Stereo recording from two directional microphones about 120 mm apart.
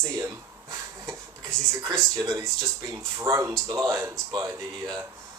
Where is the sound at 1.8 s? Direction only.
30° right (ahead or behind).